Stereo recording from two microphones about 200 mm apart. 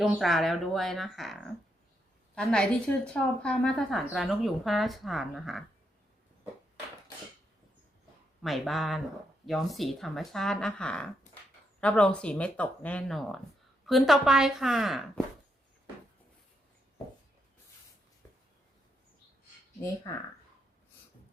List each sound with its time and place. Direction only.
0.0 s a woman's voice: centre (ahead or behind)
8.4 s a woman's voice: centre (ahead or behind)
20.1 s speech: 20° left (ahead or behind)